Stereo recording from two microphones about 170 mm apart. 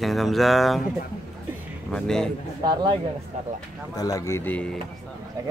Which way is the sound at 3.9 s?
20° left (ahead or behind).